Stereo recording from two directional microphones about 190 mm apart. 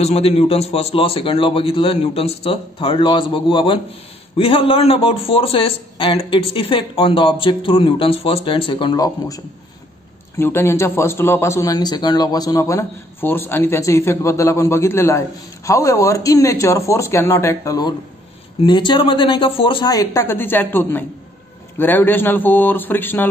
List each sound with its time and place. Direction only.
0.0 s a man's voice: 35° left (ahead or behind); by 23.2 s 10° left (ahead or behind)